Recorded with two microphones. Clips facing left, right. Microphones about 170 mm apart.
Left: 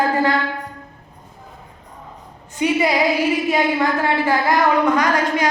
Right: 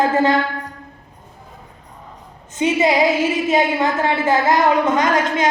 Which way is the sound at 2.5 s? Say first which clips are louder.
Right 2 dB; 25° right (ahead or behind).